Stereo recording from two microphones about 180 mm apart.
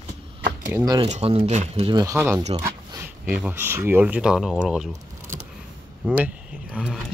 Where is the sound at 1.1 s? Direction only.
35° right (ahead or behind); by 4.9 s centre (ahead or behind).